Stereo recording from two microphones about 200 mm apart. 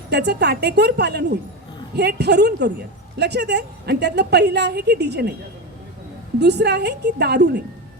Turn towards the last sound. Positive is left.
turn(degrees=-55)  # may be behind; listen again after turning